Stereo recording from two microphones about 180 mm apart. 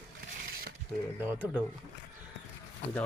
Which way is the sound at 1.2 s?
10° right (ahead or behind).